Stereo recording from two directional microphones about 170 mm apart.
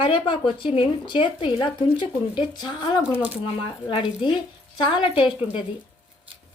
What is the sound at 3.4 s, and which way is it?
A woman's voice, 30° left (ahead or behind).